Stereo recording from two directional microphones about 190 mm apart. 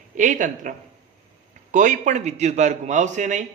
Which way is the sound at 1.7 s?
40° right (ahead or behind).